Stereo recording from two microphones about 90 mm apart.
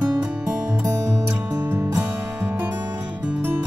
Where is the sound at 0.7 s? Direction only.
30° right (ahead or behind).